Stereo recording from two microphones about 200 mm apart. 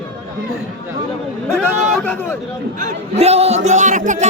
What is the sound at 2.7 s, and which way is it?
Speech, 35° right (ahead or behind).